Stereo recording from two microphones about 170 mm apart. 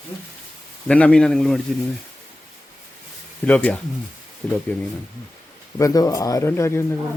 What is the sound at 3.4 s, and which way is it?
Speech, 10° left (ahead or behind).